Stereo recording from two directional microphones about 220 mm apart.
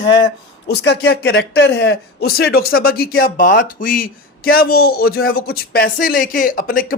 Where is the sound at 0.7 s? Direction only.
50° left (ahead or behind).